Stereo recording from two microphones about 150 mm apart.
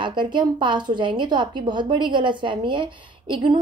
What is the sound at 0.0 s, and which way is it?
A woman's voice, 30° right (ahead or behind).